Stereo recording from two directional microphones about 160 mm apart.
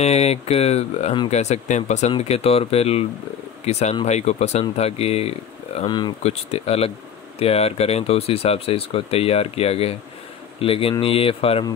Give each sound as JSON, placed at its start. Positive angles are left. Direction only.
{"t": 0.0, "sound": "speech", "side_deg": 40}
{"t": 5.9, "sound": "speech", "side_deg": 25}
{"t": 6.2, "sound": "speech", "side_deg": 40}